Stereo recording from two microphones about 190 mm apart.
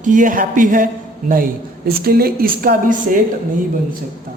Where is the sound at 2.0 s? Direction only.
55° right (ahead or behind).